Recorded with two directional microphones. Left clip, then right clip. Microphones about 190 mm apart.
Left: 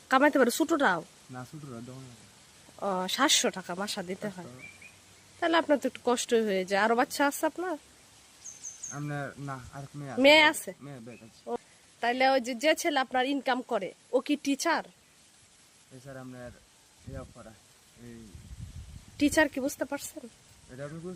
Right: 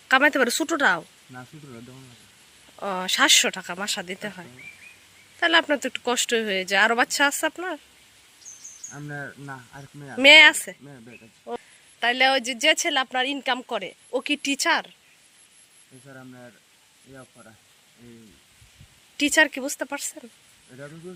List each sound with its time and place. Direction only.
0.1 s speech: 10° left (ahead or behind)
8.9 s speech: 10° left (ahead or behind)
16.0 s speech: 15° left (ahead or behind)
19.1 s speech: 5° left (ahead or behind)